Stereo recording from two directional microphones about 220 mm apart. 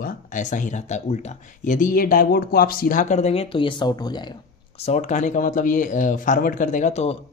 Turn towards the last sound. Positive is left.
turn(degrees=30)  # may be behind; listen again after turning